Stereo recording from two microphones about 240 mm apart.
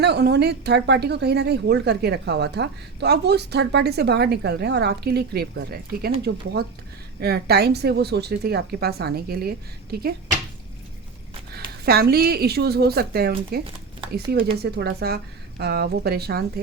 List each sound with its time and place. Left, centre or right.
0.0 s a woman's voice: right
11.5 s a woman's voice: right